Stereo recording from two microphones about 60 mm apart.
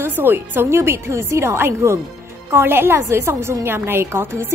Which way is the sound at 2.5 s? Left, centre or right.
Right.